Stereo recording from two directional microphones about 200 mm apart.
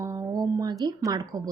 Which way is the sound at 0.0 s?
15° right (ahead or behind).